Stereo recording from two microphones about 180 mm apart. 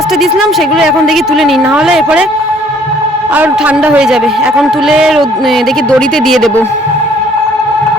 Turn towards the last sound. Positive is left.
turn(degrees=0)  # may be behind; listen again after turning